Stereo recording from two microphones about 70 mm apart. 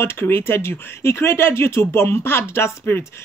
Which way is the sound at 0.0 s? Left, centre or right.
Left.